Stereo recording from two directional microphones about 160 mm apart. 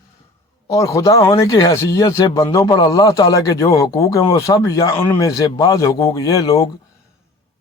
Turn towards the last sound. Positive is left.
turn(degrees=20)  # may be behind; listen again after turning